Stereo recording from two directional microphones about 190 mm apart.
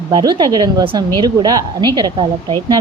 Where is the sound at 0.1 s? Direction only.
20° right (ahead or behind).